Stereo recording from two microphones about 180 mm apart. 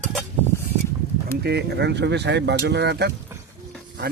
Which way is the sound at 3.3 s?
15° right (ahead or behind).